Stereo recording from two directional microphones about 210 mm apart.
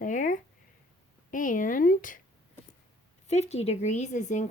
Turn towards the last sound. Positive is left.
turn(degrees=35)  # may be behind; listen again after turning